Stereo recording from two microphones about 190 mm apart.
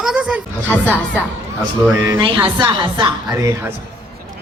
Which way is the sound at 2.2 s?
25° right (ahead or behind).